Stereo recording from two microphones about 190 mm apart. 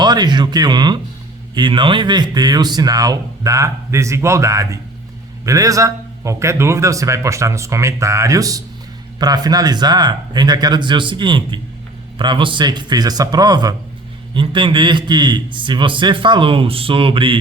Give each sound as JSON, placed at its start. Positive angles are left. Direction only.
{"t": 0.0, "sound": "a man's voice", "side_deg": -20}